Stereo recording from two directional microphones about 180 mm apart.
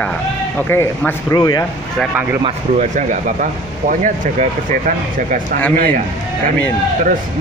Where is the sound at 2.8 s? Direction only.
45° right (ahead or behind).